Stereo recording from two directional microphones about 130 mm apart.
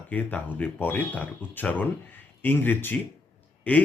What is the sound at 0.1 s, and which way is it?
Speech, 10° left (ahead or behind).